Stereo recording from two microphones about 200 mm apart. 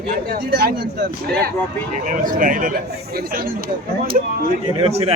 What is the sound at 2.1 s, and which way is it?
Speech, 40° right (ahead or behind).